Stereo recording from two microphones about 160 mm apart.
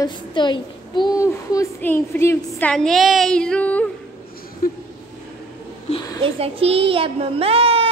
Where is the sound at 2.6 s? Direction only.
5° left (ahead or behind).